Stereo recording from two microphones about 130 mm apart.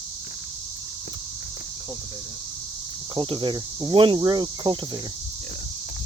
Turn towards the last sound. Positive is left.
turn(degrees=-35)  # may be behind; listen again after turning